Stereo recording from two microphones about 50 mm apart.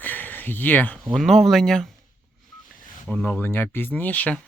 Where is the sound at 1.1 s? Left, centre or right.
Centre.